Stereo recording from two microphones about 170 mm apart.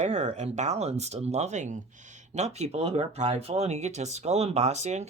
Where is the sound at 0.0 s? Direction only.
40° right (ahead or behind).